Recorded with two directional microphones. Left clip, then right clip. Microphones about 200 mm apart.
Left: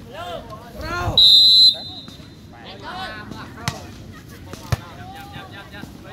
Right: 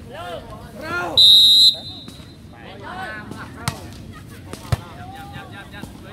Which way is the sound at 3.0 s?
20° left (ahead or behind).